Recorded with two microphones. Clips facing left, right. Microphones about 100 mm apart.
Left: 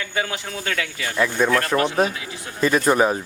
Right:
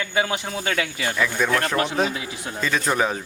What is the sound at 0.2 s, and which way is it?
Speech, 15° right (ahead or behind).